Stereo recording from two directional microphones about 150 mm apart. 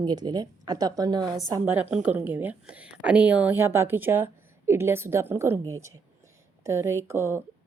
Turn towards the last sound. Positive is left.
turn(degrees=-20)  # may be behind; listen again after turning